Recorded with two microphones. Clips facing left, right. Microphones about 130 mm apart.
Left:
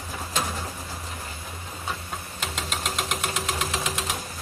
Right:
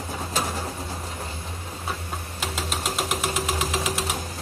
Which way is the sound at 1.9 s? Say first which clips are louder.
Right 1 dB; 5° right (ahead or behind).